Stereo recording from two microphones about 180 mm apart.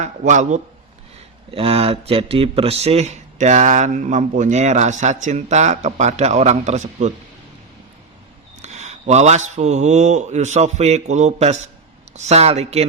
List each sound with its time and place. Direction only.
0.0 s a man's voice: 40° right (ahead or behind)
1.5 s speech: 30° right (ahead or behind)
8.6 s speech: 40° right (ahead or behind)